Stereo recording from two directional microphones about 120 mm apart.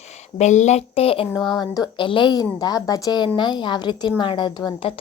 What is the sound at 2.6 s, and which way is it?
A woman's voice, 30° left (ahead or behind).